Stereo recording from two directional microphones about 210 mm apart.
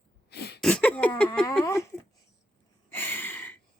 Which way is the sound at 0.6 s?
5° left (ahead or behind).